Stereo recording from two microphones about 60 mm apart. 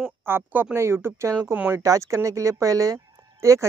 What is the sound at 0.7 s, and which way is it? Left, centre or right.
Speech, right.